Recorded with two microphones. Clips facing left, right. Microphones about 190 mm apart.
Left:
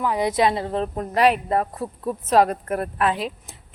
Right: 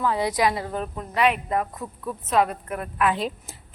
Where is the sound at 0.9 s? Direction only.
40° left (ahead or behind).